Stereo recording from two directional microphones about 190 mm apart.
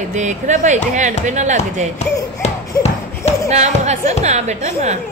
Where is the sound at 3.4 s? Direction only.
35° right (ahead or behind).